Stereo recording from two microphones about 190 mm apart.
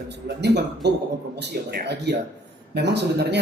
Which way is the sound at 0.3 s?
65° right (ahead or behind).